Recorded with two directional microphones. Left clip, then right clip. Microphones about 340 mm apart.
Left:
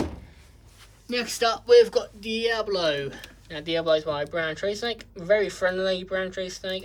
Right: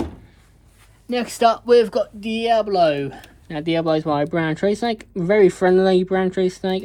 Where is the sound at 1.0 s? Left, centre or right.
Centre.